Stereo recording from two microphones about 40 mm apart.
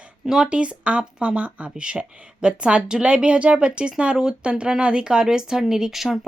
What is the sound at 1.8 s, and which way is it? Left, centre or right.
A woman's voice, right.